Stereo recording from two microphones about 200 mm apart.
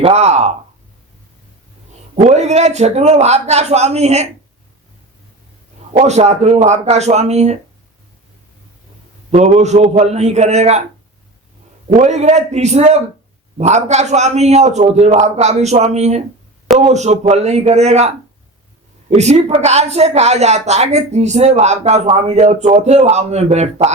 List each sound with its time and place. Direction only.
0.0 s a woman's voice: 35° right (ahead or behind)
2.1 s a woman's voice: 35° right (ahead or behind)
5.9 s a woman's voice: 30° right (ahead or behind)
9.3 s a woman's voice: 35° right (ahead or behind)
11.9 s a woman's voice: 40° right (ahead or behind)
19.1 s a woman's voice: 35° right (ahead or behind)